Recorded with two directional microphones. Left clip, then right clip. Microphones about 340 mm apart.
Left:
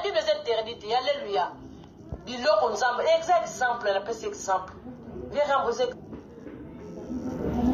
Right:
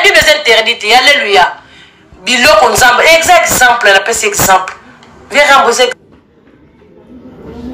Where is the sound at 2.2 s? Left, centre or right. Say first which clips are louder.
Right 18 dB; right.